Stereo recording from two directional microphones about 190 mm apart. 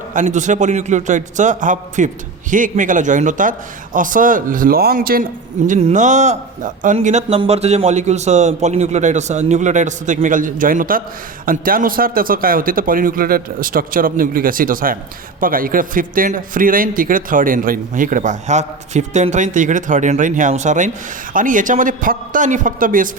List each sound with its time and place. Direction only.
0.1 s a man's voice: 40° right (ahead or behind)
5.6 s a man's voice: 40° right (ahead or behind)